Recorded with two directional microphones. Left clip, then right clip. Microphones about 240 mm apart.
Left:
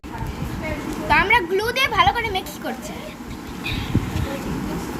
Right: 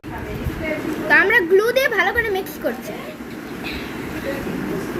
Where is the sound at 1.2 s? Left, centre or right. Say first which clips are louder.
Right 4 dB; left.